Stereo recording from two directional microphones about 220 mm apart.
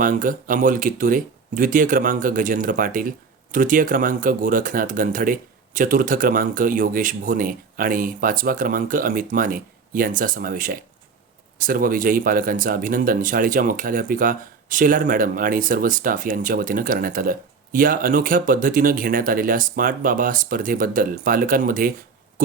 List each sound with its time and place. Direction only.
0.0 s speech: 40° right (ahead or behind)